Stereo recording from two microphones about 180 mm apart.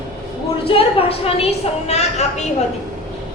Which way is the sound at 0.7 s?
30° left (ahead or behind).